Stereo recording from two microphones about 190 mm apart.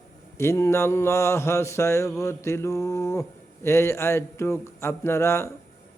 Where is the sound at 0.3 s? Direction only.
15° left (ahead or behind).